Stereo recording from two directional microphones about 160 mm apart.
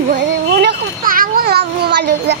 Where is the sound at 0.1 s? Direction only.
75° right (ahead or behind).